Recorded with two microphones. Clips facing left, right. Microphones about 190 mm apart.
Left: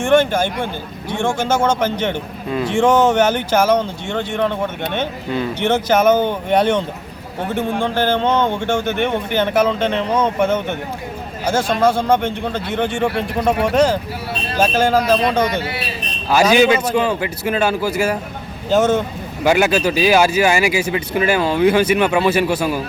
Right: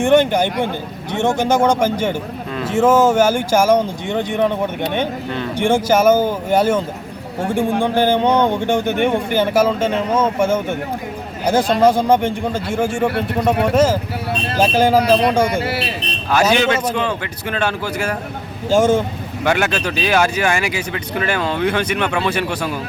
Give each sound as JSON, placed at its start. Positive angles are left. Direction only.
{"t": 0.0, "sound": "speech", "side_deg": -15}
{"t": 16.3, "sound": "speech", "side_deg": 10}
{"t": 18.7, "sound": "speech", "side_deg": -10}
{"t": 19.5, "sound": "speech", "side_deg": 10}